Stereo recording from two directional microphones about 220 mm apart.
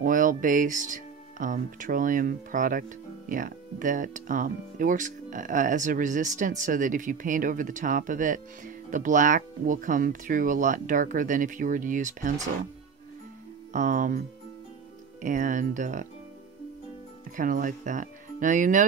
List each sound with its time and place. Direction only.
0.0 s speech: 40° right (ahead or behind)
13.7 s speech: 35° right (ahead or behind)
15.2 s speech: 35° right (ahead or behind)
17.4 s speech: 35° right (ahead or behind)